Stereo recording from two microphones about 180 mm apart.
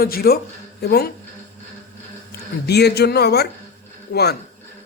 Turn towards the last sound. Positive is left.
turn(degrees=55)  # may be behind; listen again after turning